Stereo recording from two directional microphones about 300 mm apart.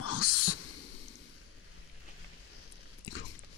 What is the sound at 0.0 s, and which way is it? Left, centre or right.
Owl, left.